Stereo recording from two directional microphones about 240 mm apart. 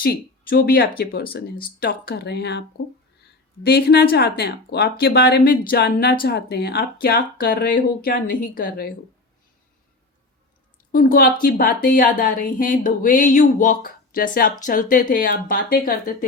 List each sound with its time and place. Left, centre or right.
0.0 s speech: left
10.9 s speech: left